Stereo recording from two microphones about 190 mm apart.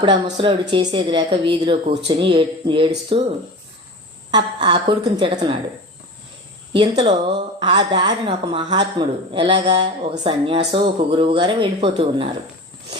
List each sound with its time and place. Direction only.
0.0 s speech: 25° right (ahead or behind)
4.3 s speech: 25° right (ahead or behind)
6.7 s speech: 25° right (ahead or behind)